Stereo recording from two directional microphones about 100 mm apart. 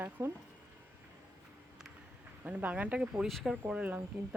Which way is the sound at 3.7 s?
15° right (ahead or behind).